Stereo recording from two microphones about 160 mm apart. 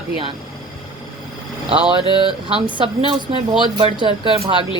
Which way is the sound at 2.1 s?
35° right (ahead or behind).